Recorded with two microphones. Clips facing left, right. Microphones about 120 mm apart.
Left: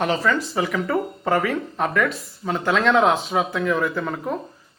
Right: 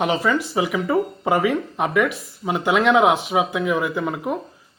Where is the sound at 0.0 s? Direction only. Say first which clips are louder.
Right 1 dB; 15° right (ahead or behind).